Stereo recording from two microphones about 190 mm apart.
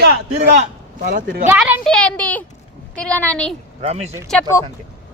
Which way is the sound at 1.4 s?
10° right (ahead or behind).